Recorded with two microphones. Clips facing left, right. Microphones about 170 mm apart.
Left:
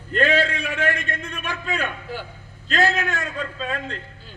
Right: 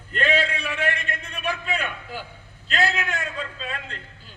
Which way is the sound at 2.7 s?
40° left (ahead or behind).